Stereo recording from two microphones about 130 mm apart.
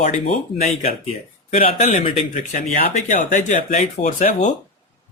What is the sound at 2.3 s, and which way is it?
Speech, 70° left (ahead or behind).